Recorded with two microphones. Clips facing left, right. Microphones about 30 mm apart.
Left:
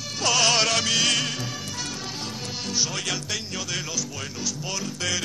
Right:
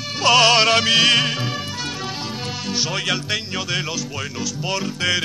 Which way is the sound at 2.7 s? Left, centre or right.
Right.